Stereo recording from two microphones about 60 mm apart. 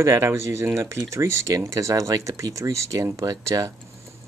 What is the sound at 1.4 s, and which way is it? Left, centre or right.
Speech, right.